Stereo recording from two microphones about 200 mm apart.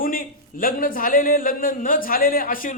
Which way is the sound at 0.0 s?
45° left (ahead or behind).